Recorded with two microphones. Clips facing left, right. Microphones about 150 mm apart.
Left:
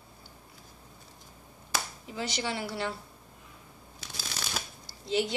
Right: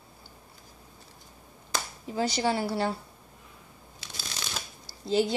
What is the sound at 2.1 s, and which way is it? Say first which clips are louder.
Speech: right 7 dB; 40° right (ahead or behind).